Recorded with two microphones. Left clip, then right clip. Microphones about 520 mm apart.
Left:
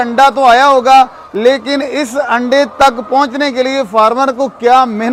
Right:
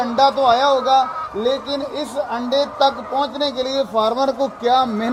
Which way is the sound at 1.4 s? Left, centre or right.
Left.